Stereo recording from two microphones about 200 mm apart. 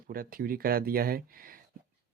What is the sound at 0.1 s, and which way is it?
Speech, 45° right (ahead or behind).